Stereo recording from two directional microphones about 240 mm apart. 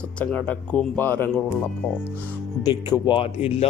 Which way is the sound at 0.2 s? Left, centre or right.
Centre.